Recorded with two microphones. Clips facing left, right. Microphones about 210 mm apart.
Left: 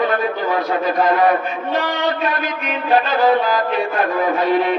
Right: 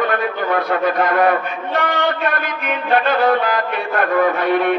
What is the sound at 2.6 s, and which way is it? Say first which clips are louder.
Music: even; 60° right (ahead or behind).